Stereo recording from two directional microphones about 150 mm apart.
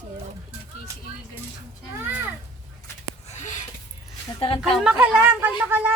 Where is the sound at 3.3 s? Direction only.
50° left (ahead or behind).